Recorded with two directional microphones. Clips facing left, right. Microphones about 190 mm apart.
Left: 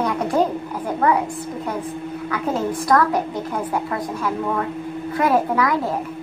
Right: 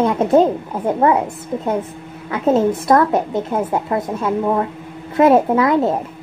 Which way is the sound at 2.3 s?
25° right (ahead or behind).